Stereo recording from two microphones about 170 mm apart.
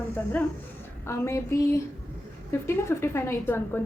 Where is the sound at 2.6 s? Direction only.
15° left (ahead or behind).